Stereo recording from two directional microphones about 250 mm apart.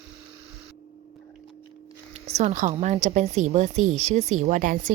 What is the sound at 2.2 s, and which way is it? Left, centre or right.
A woman's voice, right.